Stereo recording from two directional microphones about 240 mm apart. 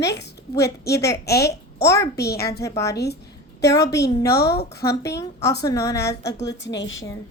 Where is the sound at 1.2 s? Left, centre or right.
Left.